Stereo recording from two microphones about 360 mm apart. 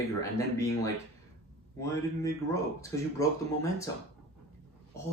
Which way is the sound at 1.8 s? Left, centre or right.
Centre.